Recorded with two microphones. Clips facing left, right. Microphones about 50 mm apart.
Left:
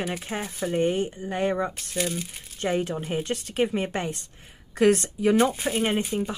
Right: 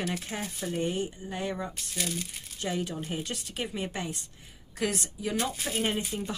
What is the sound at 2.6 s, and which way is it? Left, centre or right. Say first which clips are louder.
Speech: left 6 dB; left.